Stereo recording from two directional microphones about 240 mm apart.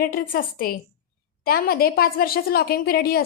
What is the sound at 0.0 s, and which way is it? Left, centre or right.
A woman's voice, left.